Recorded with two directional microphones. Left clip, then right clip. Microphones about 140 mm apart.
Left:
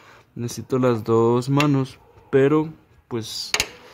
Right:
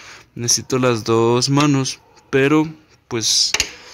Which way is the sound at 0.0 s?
5° left (ahead or behind).